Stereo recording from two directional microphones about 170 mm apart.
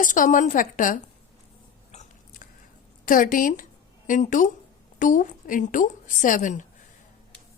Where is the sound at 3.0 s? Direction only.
55° left (ahead or behind).